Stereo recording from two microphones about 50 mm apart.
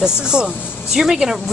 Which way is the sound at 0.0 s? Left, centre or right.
Centre.